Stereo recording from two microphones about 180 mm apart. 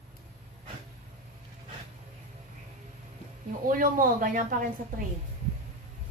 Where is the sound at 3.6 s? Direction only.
50° right (ahead or behind).